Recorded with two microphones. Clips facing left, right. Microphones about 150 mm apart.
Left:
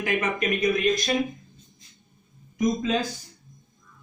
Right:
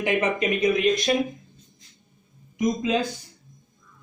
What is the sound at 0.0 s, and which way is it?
Speech, 25° right (ahead or behind).